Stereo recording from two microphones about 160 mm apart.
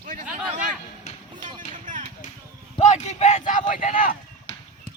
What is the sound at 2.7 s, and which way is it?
Speech, 45° left (ahead or behind).